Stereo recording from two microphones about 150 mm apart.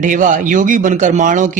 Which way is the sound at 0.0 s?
60° right (ahead or behind).